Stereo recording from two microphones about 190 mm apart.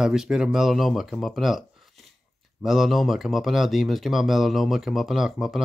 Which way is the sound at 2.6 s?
Centre (ahead or behind).